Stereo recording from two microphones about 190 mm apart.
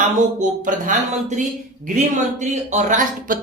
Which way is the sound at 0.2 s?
40° right (ahead or behind).